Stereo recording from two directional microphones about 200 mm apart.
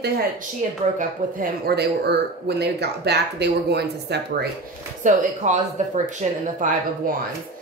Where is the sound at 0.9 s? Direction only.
50° right (ahead or behind).